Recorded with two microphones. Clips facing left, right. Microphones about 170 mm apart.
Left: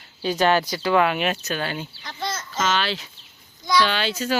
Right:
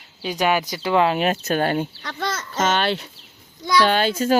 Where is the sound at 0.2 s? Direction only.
15° right (ahead or behind).